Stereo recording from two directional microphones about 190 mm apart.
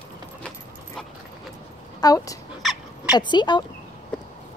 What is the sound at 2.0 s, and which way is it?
Speech, 20° left (ahead or behind).